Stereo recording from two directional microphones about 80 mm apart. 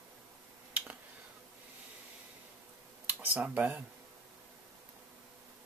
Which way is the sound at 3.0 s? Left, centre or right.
Right.